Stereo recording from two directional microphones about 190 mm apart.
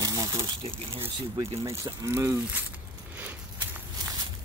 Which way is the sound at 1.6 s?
15° right (ahead or behind).